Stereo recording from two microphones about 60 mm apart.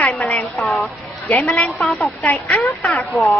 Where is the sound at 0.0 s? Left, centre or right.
Left.